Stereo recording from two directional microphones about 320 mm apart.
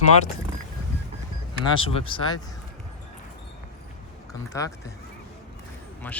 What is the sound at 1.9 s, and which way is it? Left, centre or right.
Speech, centre.